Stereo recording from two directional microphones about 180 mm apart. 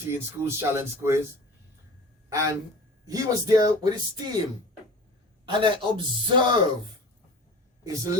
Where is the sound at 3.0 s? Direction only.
20° right (ahead or behind).